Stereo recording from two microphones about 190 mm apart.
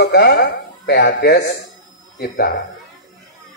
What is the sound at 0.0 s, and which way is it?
Speech, 65° left (ahead or behind).